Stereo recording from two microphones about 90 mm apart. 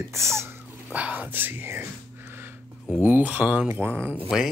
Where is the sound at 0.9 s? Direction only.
15° right (ahead or behind).